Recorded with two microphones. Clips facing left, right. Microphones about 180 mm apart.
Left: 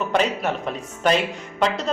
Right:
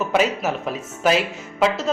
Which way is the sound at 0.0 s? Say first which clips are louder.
Right 1 dB; 5° right (ahead or behind).